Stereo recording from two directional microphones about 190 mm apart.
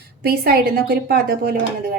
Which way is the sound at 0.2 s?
55° right (ahead or behind).